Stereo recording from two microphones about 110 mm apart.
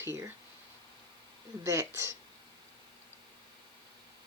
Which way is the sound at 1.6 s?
25° right (ahead or behind).